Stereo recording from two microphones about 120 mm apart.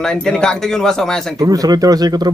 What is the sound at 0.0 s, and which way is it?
A man's voice, 5° left (ahead or behind).